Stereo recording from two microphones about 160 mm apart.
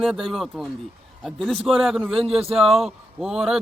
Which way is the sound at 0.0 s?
Centre (ahead or behind).